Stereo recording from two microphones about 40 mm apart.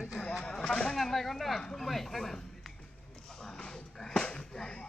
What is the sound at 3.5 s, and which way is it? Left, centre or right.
Music, centre.